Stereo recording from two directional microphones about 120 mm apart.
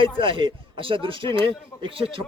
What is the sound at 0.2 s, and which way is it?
Speech, 45° right (ahead or behind).